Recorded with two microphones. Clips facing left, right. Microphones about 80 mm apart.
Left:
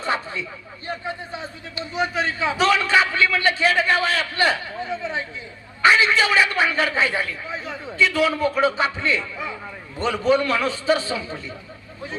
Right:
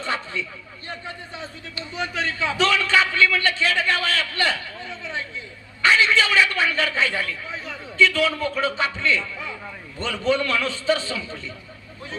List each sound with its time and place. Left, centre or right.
0.0 s a man's voice: left